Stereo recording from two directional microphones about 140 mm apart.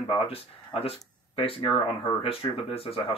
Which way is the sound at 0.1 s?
40° left (ahead or behind).